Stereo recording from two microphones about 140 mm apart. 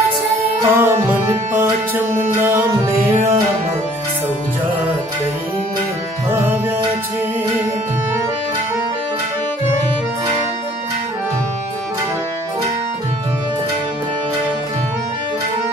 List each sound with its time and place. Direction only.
0.6 s music: 15° right (ahead or behind)